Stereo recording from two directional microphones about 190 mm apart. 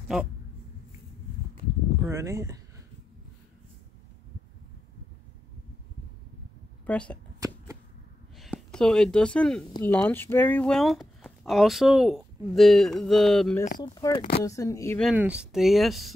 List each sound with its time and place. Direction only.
2.0 s speech: 15° right (ahead or behind)
6.9 s speech: 5° left (ahead or behind)
8.4 s speech: centre (ahead or behind)
13.7 s speech: 20° left (ahead or behind)
15.0 s speech: 5° right (ahead or behind)